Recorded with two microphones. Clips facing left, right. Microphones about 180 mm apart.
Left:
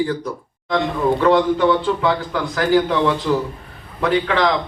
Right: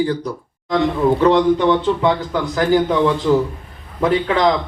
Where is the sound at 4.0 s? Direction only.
25° right (ahead or behind).